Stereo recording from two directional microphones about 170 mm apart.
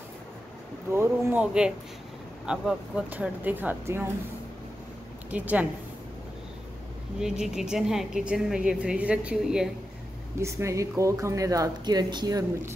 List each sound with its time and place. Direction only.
0.9 s speech: 10° right (ahead or behind)
5.3 s speech: 10° right (ahead or behind)
7.2 s a woman's voice: 5° right (ahead or behind)
10.4 s speech: 15° right (ahead or behind)